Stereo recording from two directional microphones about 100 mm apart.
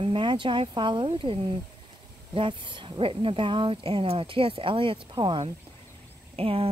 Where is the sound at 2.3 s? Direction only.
55° right (ahead or behind).